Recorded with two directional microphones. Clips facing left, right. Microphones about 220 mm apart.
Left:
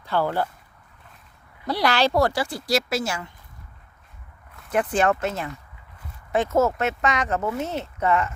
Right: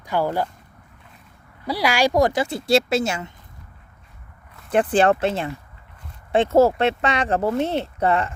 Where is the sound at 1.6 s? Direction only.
10° right (ahead or behind).